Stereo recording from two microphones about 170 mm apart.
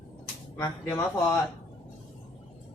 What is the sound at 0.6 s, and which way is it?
Speech, 15° left (ahead or behind).